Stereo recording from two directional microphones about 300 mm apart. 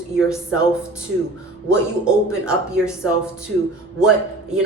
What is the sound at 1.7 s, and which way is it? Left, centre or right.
Speech, centre.